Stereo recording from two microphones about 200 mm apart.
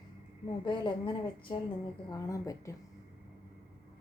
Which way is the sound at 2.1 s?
15° left (ahead or behind).